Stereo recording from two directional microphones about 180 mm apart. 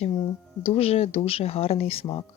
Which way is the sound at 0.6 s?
35° left (ahead or behind).